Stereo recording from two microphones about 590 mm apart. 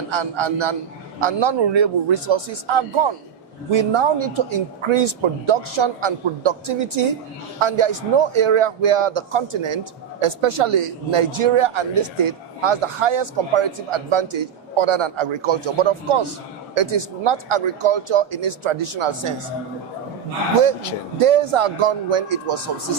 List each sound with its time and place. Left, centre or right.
0.1 s a man's voice: right
21.2 s a man's voice: right